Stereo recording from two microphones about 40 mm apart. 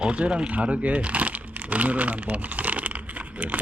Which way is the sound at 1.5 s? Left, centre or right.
Right.